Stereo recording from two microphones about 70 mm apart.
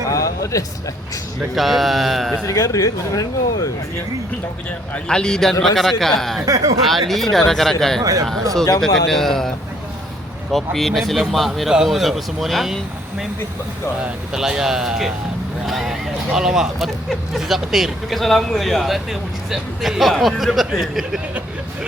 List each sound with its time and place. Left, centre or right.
0.1 s a sound: left
1.5 s speech: centre
2.5 s speech: left
5.0 s a man's voice: centre
6.4 s speech: right
6.9 s speech: centre
8.0 s speech: right
8.8 s speech: centre
10.5 s speech: centre
14.3 s speech: centre